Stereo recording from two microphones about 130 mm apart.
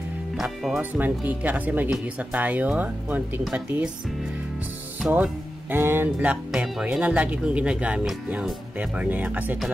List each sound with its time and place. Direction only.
0.4 s speech: 5° right (ahead or behind)
5.1 s speech: 10° right (ahead or behind)
6.5 s speech: 5° right (ahead or behind)